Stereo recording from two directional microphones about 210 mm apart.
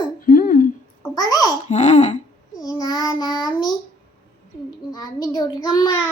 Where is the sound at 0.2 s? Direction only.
40° left (ahead or behind).